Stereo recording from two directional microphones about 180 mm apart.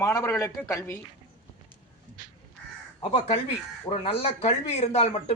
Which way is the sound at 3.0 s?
30° left (ahead or behind).